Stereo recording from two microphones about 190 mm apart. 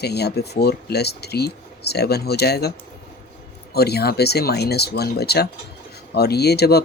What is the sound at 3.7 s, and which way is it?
Speech, 55° left (ahead or behind).